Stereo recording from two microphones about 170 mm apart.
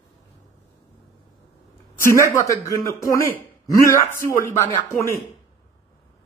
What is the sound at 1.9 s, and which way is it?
A woman's voice, 15° left (ahead or behind).